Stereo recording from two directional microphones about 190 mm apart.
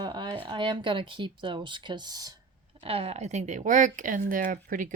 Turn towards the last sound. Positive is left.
turn(degrees=-45)  # may be behind; listen again after turning